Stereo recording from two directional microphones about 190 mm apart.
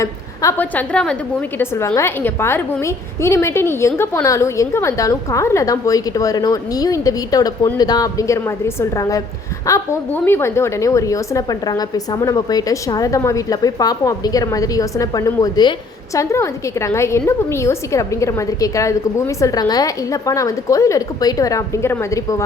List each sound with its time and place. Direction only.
0.0 s a woman's voice: 15° left (ahead or behind)